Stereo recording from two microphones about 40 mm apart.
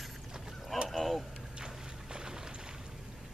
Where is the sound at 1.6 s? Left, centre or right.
Centre.